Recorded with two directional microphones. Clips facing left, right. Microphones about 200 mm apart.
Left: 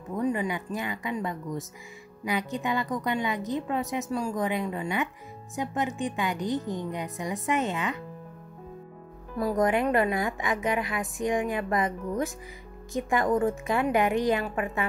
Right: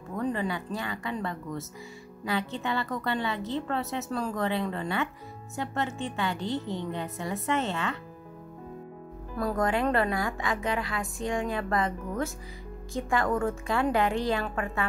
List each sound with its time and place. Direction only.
0.1 s a sound: 15° left (ahead or behind)
0.7 s a woman's voice: 20° left (ahead or behind)
9.4 s a woman's voice: 15° left (ahead or behind)